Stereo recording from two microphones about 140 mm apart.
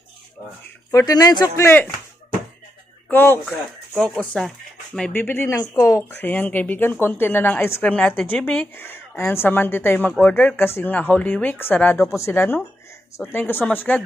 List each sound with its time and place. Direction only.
0.9 s speech: 25° left (ahead or behind)
1.6 s speech: 15° left (ahead or behind)
3.1 s speech: 15° left (ahead or behind)
3.9 s speech: centre (ahead or behind)